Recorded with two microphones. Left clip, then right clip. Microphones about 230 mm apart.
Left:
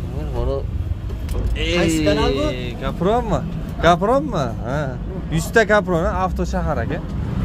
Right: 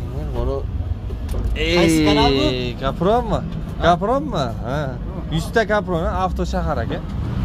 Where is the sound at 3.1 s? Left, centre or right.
Centre.